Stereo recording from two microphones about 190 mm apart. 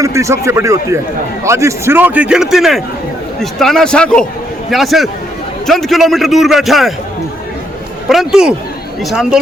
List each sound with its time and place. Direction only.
0.0 s a man's voice: 15° right (ahead or behind)
8.0 s a man's voice: centre (ahead or behind)